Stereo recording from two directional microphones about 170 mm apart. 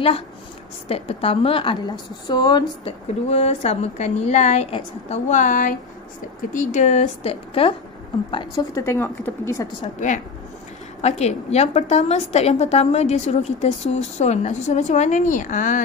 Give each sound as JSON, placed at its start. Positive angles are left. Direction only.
{"t": 0.8, "sound": "a woman's voice", "side_deg": 35}
{"t": 3.3, "sound": "a woman's voice", "side_deg": 40}
{"t": 9.9, "sound": "a woman's voice", "side_deg": 45}